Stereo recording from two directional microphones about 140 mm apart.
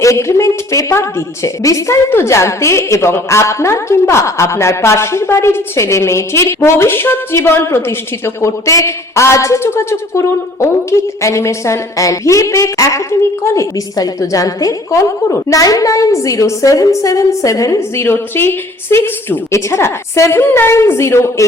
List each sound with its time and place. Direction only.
0.0 s a woman's voice: 20° left (ahead or behind)